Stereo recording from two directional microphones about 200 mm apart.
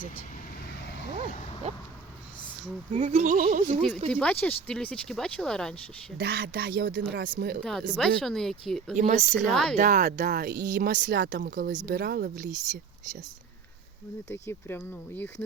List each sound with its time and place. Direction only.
1.6 s speech: 30° right (ahead or behind)
2.9 s speech: 35° right (ahead or behind)
4.1 s speech: 5° left (ahead or behind)
6.1 s speech: 55° right (ahead or behind)
7.6 s speech: centre (ahead or behind)
9.0 s speech: 40° right (ahead or behind)
9.3 s speech: 5° left (ahead or behind)
9.7 s speech: 40° right (ahead or behind)
14.3 s speech: 10° left (ahead or behind)